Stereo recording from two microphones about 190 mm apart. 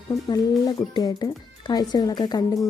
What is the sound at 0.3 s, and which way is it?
Speech, 20° left (ahead or behind).